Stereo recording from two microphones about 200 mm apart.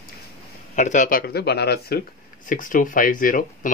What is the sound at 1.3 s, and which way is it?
Speech, 55° left (ahead or behind).